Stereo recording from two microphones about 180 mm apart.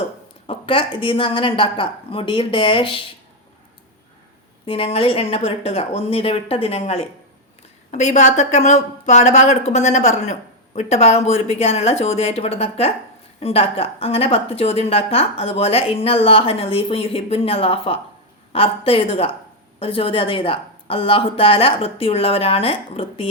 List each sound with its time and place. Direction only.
0.4 s a woman's voice: 30° left (ahead or behind)
4.6 s a woman's voice: 30° left (ahead or behind)